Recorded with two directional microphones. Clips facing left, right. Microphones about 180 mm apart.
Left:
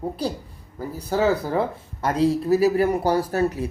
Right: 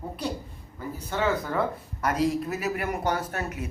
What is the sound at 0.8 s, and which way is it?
Speech, 35° left (ahead or behind).